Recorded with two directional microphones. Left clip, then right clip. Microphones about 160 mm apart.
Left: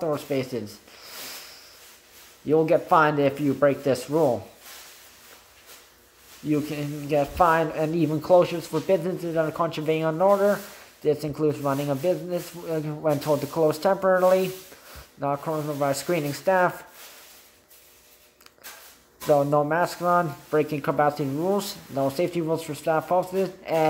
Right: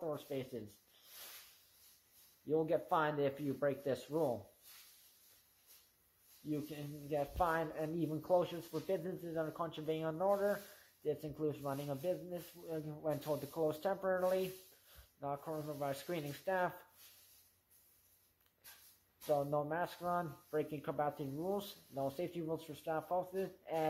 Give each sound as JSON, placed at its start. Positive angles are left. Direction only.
{"t": 0.0, "sound": "speech", "side_deg": 0}
{"t": 2.4, "sound": "speech", "side_deg": 0}
{"t": 6.5, "sound": "speech", "side_deg": 0}
{"t": 19.2, "sound": "speech", "side_deg": 0}